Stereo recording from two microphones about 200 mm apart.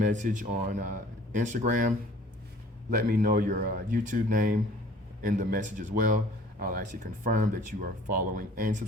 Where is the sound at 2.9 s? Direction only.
45° right (ahead or behind).